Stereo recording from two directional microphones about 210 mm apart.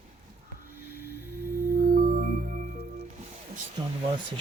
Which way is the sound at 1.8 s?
40° right (ahead or behind).